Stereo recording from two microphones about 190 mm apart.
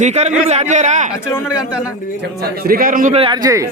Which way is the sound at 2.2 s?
55° right (ahead or behind).